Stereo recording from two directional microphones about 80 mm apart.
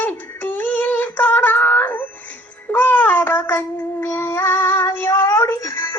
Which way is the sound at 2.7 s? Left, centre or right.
Left.